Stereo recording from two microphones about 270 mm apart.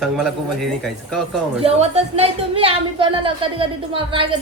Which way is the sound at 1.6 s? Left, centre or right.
Right.